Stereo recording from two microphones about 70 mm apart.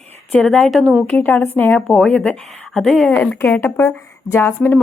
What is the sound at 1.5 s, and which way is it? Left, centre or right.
Speech, left.